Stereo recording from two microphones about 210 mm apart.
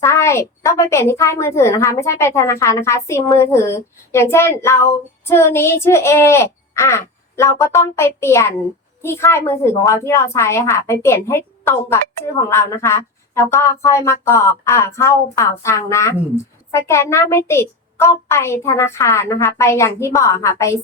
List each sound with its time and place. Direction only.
0.0 s a woman's voice: 10° left (ahead or behind)